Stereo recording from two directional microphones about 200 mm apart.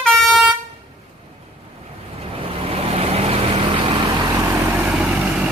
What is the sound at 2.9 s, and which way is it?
Vehicle, 30° right (ahead or behind).